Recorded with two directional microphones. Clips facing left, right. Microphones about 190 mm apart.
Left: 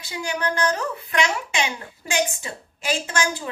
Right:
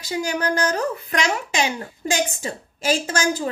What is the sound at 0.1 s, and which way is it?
A woman's voice, 40° right (ahead or behind).